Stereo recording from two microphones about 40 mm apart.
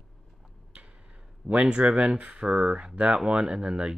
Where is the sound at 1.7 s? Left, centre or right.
Right.